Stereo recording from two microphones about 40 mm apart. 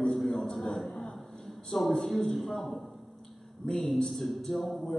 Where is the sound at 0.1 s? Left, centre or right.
Centre.